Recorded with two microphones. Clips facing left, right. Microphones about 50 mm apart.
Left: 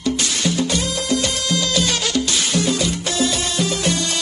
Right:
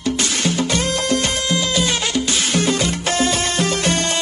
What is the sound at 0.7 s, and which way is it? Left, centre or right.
Music, right.